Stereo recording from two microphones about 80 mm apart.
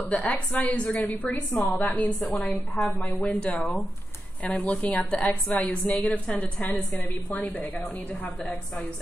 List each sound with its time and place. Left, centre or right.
0.1 s a woman's voice: centre
2.3 s a woman's voice: centre
2.7 s a woman's voice: centre